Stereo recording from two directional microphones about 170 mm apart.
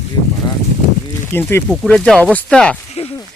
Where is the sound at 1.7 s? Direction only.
5° left (ahead or behind).